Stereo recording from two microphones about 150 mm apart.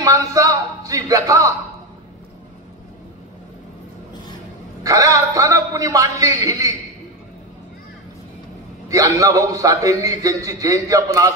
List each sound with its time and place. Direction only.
0.0 s a sound: 20° right (ahead or behind)
4.8 s a man's voice: 25° right (ahead or behind)
8.8 s a man's voice: 20° right (ahead or behind)